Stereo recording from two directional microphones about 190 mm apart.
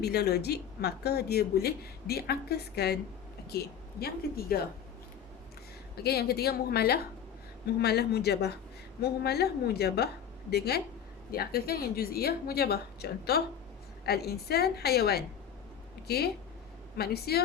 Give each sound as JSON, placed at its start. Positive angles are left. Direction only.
{"t": 0.0, "sound": "a woman's voice", "side_deg": 55}
{"t": 6.0, "sound": "a woman's voice", "side_deg": 55}